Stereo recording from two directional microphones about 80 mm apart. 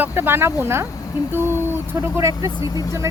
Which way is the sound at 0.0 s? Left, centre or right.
Right.